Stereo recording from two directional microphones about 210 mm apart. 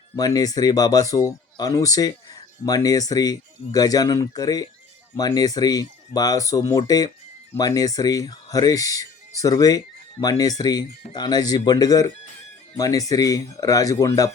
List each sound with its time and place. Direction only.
0.2 s speech: 15° left (ahead or behind)